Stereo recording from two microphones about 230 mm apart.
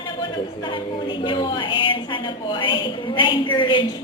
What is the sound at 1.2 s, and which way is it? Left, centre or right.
A woman's voice, left.